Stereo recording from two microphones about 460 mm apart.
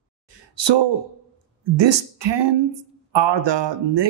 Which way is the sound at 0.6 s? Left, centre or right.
Right.